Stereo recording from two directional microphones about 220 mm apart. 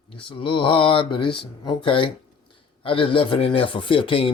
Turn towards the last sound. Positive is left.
turn(degrees=25)  # may be behind; listen again after turning